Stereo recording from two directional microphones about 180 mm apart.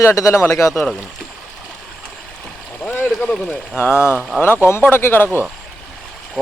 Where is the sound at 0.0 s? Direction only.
15° left (ahead or behind).